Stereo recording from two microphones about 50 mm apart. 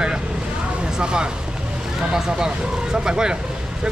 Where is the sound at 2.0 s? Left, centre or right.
Centre.